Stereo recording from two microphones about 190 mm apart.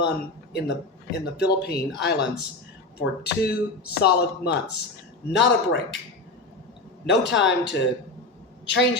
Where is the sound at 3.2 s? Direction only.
55° left (ahead or behind).